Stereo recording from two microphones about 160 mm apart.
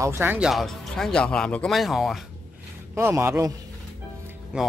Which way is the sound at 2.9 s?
15° right (ahead or behind).